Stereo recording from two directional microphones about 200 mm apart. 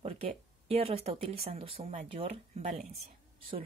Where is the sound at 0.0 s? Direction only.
30° right (ahead or behind).